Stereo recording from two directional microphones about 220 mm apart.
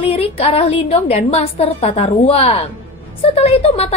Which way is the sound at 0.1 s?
25° left (ahead or behind).